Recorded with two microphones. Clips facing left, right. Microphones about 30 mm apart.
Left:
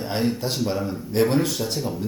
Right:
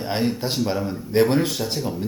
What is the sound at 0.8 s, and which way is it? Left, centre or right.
A man's voice, centre.